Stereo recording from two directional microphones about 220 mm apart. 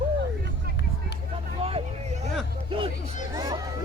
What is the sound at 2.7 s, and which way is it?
Hubbub, 25° right (ahead or behind).